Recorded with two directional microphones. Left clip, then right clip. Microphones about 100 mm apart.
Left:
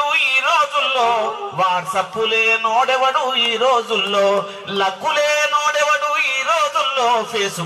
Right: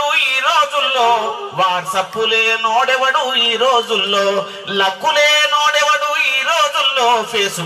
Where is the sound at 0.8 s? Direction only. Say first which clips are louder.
Right 3 dB; 25° left (ahead or behind).